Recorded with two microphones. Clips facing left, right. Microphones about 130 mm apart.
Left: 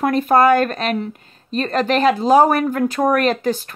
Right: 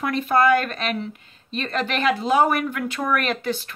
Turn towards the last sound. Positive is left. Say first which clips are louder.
# left 7 dB
turn(degrees=40)  # may be behind; listen again after turning